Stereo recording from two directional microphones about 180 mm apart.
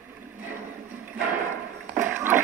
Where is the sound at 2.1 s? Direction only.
10° right (ahead or behind).